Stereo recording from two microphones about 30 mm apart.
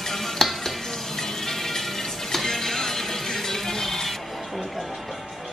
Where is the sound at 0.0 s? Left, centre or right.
Centre.